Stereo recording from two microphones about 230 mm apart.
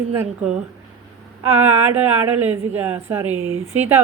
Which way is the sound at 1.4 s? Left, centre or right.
Centre.